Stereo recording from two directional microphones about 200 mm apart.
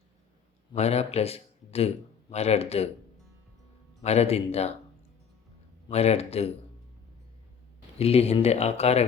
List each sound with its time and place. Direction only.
0.7 s a man's voice: 30° left (ahead or behind)
4.0 s speech: 30° left (ahead or behind)
5.9 s speech: 30° left (ahead or behind)
7.9 s speech: 30° left (ahead or behind)